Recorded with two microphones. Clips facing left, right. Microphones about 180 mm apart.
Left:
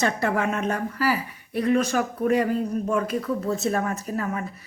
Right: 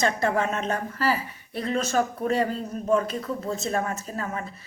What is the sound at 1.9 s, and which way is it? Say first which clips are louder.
Speech: left 2 dB; 30° right (ahead or behind).